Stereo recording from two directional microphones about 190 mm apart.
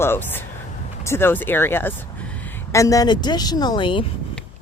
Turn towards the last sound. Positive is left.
turn(degrees=25)  # may be behind; listen again after turning